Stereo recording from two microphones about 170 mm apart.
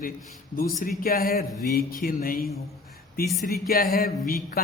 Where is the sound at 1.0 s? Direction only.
60° left (ahead or behind).